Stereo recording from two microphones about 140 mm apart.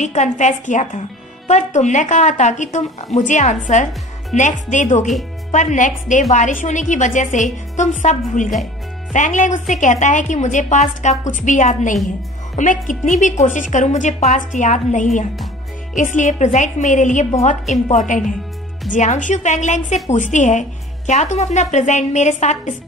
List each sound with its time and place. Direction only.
0.0 s a woman's voice: 55° left (ahead or behind)